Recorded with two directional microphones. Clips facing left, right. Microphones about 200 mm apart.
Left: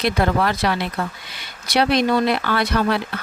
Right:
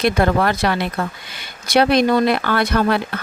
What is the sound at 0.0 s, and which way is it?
Speech, 50° right (ahead or behind).